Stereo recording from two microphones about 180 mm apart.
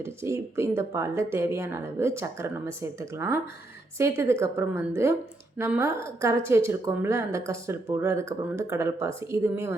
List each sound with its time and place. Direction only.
0.0 s a woman's voice: 15° right (ahead or behind)